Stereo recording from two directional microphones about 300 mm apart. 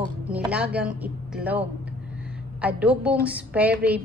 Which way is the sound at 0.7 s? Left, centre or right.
Centre.